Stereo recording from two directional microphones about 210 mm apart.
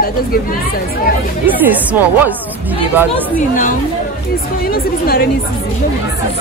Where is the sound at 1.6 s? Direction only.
10° right (ahead or behind).